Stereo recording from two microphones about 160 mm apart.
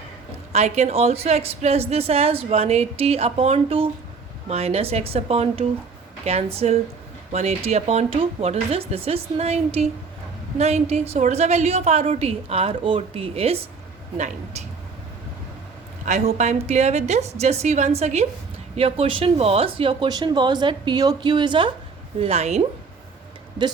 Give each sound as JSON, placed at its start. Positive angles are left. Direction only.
{"t": 0.5, "sound": "a woman's voice", "side_deg": -40}
{"t": 16.0, "sound": "a woman's voice", "side_deg": -45}
{"t": 22.2, "sound": "a woman's voice", "side_deg": -40}